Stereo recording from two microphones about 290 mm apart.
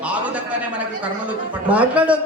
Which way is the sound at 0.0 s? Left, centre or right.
Centre.